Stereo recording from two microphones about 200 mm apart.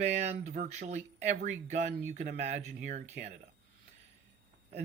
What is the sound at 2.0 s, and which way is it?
Speech, 35° right (ahead or behind).